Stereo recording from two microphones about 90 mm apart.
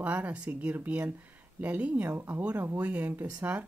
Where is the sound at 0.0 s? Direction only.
15° right (ahead or behind).